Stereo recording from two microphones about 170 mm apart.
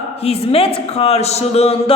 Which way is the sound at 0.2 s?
35° left (ahead or behind).